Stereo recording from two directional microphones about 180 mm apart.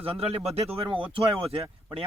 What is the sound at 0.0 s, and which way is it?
Speech, 35° right (ahead or behind).